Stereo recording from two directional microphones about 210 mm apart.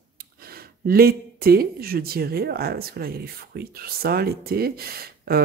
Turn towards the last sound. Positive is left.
turn(degrees=-45)  # may be behind; listen again after turning